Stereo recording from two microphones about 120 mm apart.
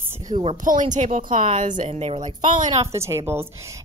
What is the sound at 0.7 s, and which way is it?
Speech, 90° right.